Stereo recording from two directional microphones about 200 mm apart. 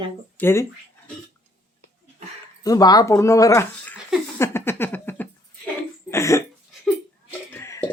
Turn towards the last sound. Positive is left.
turn(degrees=10)  # may be behind; listen again after turning